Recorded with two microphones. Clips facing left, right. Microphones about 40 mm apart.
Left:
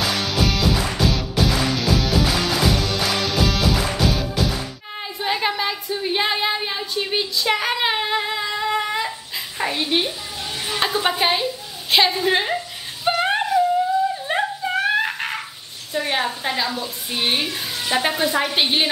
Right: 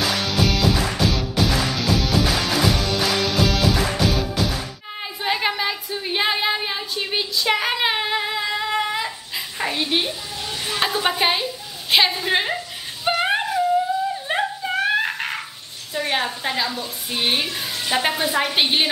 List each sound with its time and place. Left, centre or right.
0.0 s music: centre
5.2 s a sound: centre
15.9 s a woman's voice: centre